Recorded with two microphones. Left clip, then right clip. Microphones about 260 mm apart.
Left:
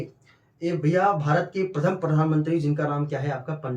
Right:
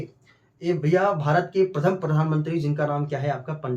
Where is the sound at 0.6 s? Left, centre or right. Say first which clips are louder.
Right 1 dB; centre.